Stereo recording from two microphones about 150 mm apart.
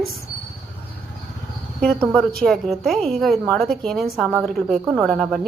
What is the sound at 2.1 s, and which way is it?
A woman's voice, centre (ahead or behind).